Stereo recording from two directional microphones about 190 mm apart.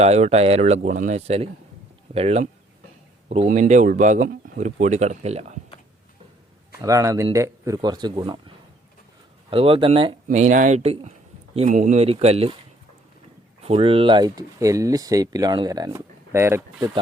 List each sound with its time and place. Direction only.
0.0 s speech: 35° right (ahead or behind)
6.8 s speech: 15° right (ahead or behind)
10.2 s speech: 40° right (ahead or behind)
13.6 s speech: 30° right (ahead or behind); by 16.8 s 10° right (ahead or behind)